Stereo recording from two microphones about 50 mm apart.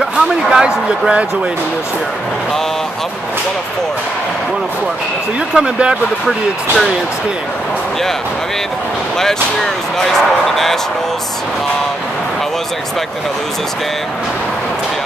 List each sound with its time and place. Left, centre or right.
0.0 s speech: centre
5.5 s speech: right
6.2 s speech: centre
9.9 s speech: centre